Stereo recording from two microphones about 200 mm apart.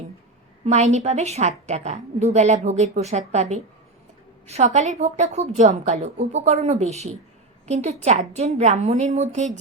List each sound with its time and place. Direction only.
0.6 s a woman's voice: 35° right (ahead or behind)